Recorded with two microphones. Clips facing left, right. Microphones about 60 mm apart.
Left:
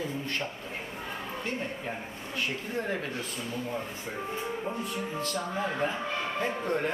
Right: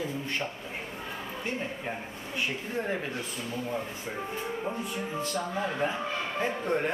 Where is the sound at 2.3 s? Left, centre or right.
Centre.